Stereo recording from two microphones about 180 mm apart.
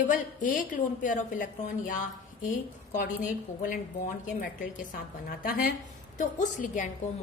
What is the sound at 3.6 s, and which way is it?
A woman's voice, 45° left (ahead or behind).